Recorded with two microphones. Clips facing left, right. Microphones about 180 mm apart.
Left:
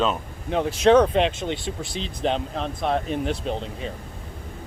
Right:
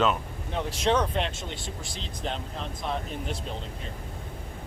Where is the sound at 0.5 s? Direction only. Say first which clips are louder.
Left 9 dB; 70° left (ahead or behind).